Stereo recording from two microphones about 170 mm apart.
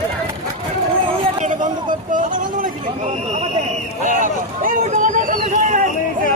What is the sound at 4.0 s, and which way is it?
Speech, 50° right (ahead or behind).